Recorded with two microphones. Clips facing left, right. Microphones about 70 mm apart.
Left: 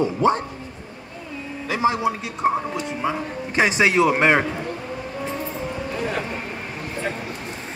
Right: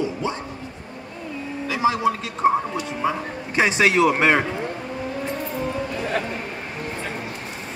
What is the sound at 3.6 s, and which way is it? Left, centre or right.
Speech, centre.